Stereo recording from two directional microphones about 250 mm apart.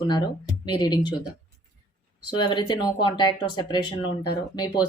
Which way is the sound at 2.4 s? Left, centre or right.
Centre.